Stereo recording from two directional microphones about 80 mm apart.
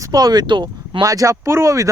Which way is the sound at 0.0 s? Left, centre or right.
Right.